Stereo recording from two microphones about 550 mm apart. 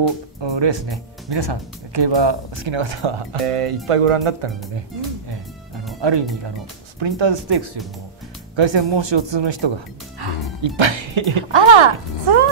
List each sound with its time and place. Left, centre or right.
0.4 s speech: right
5.9 s speech: right
10.8 s speech: right